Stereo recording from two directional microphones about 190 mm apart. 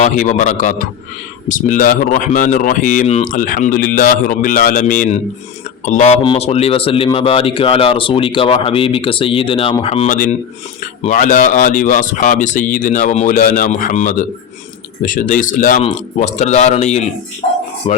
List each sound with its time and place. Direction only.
0.0 s speech: 40° left (ahead or behind)